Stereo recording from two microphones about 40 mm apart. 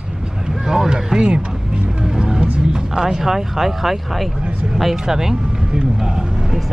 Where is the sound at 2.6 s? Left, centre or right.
Centre.